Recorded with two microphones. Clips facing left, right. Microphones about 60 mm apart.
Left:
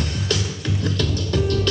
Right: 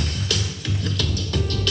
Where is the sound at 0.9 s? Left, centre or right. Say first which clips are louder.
Left 4 dB; left.